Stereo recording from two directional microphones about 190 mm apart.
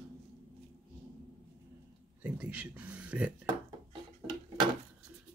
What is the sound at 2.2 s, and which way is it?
Speech, 10° right (ahead or behind).